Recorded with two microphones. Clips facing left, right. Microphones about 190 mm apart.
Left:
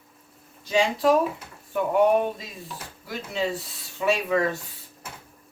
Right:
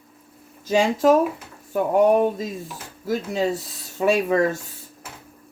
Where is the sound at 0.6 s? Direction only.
45° right (ahead or behind).